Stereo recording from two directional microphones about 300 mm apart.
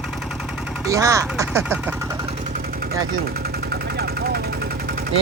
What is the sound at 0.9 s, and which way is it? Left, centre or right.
Speech, centre.